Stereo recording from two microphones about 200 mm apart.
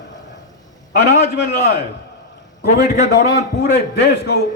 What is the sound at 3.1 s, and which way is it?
A man's voice, 55° left (ahead or behind).